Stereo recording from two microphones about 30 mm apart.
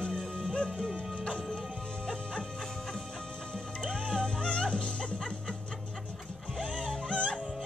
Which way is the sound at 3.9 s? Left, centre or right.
Centre.